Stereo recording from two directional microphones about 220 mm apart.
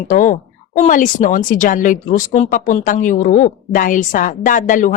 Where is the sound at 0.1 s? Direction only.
35° left (ahead or behind).